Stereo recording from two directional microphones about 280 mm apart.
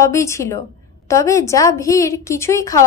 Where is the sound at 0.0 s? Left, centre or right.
Centre.